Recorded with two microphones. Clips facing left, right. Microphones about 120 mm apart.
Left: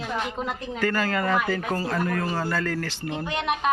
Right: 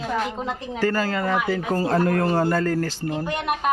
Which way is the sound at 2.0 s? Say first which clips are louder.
Right 6 dB; 65° right (ahead or behind).